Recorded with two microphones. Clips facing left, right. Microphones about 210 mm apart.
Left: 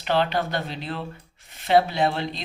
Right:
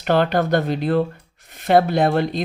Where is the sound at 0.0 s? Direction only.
50° right (ahead or behind).